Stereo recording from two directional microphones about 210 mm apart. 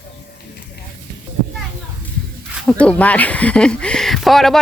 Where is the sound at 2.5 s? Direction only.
5° left (ahead or behind).